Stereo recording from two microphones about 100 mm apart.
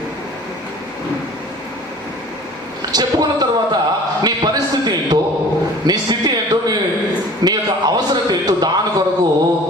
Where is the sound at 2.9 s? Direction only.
45° right (ahead or behind).